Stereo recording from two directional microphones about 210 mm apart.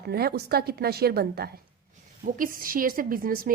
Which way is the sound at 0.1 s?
50° right (ahead or behind).